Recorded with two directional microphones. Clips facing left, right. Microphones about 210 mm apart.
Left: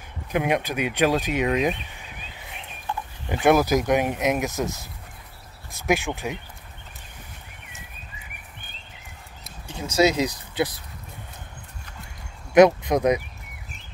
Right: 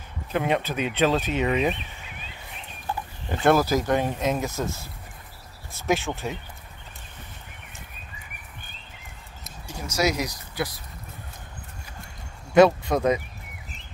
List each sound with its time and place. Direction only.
0.3 s speech: 10° left (ahead or behind)
3.3 s speech: 15° left (ahead or behind)
9.4 s speech: 25° left (ahead or behind)
12.5 s speech: 15° left (ahead or behind)